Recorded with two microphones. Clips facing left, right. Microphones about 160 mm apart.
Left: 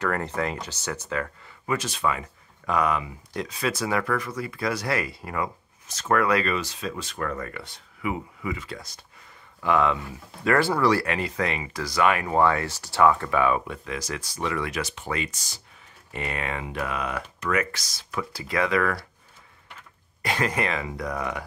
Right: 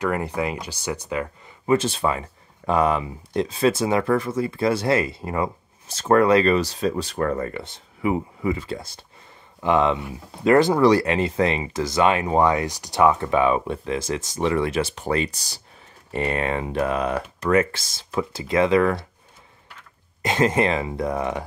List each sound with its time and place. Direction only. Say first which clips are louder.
0.0 s speech: right 3 dB; 10° right (ahead or behind)
1.7 s speech: right 6 dB; 30° right (ahead or behind)
20.2 s speech: right 6 dB; 20° right (ahead or behind)